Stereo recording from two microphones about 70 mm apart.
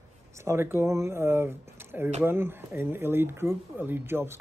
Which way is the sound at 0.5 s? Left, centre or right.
Right.